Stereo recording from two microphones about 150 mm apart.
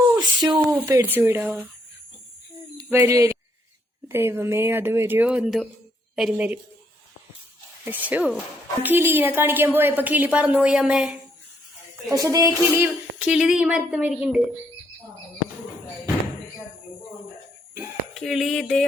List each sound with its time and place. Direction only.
0.2 s a sound: 25° right (ahead or behind)
0.5 s a woman's voice: 15° right (ahead or behind)
2.7 s a woman's voice: 15° right (ahead or behind)
7.9 s a woman's voice: 10° right (ahead or behind)
12.1 s a sound: 25° right (ahead or behind)
13.3 s a woman's voice: 5° right (ahead or behind)
18.1 s a woman's voice: centre (ahead or behind)